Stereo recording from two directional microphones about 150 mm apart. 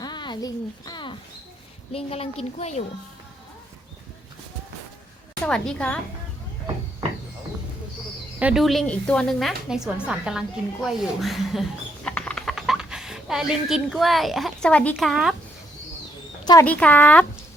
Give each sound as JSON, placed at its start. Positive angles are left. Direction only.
{"t": 0.0, "sound": "a sound", "side_deg": 30}
{"t": 1.9, "sound": "a woman's voice", "side_deg": 40}
{"t": 5.5, "sound": "speech", "side_deg": 5}
{"t": 8.4, "sound": "a woman's voice", "side_deg": -5}
{"t": 16.4, "sound": "speech", "side_deg": 25}
{"t": 16.6, "sound": "speech", "side_deg": 10}